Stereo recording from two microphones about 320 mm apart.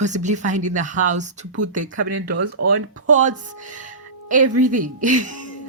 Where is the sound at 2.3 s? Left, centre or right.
Right.